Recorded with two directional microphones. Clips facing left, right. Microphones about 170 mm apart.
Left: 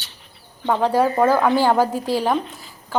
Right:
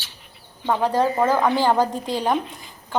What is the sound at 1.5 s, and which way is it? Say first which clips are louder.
Speech: left 2 dB; 10° left (ahead or behind).